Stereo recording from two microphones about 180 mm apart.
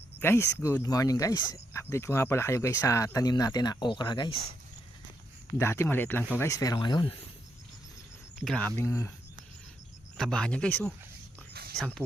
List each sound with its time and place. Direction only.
0.2 s speech: 15° left (ahead or behind)
5.5 s speech: 15° left (ahead or behind)
8.4 s speech: 10° left (ahead or behind)
10.2 s speech: 5° left (ahead or behind)